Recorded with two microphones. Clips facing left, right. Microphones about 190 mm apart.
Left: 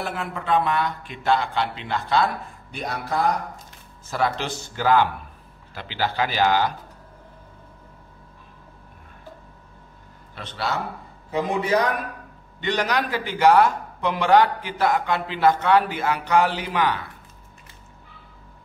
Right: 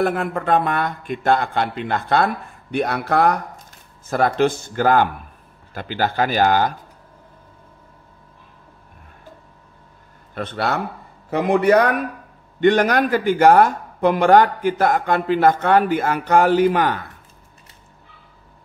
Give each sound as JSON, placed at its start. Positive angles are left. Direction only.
{"t": 0.0, "sound": "speech", "side_deg": -50}
{"t": 4.1, "sound": "speech", "side_deg": -50}
{"t": 10.3, "sound": "a man's voice", "side_deg": -55}